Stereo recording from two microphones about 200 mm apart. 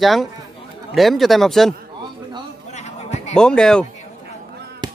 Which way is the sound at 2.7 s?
35° left (ahead or behind).